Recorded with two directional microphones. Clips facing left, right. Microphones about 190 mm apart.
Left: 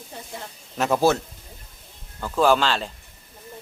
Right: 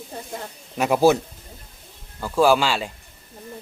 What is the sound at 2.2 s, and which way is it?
Speech, 10° right (ahead or behind).